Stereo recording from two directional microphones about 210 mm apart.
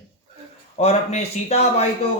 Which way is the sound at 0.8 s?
30° left (ahead or behind).